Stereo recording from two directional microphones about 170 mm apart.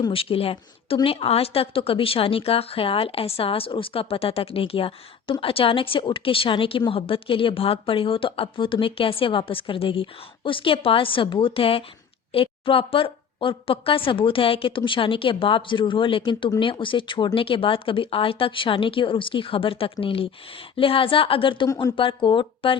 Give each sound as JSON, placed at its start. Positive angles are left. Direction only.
{"t": 0.0, "sound": "a woman's voice", "side_deg": 35}
{"t": 21.7, "sound": "speech", "side_deg": 20}
{"t": 21.9, "sound": "a woman's voice", "side_deg": 30}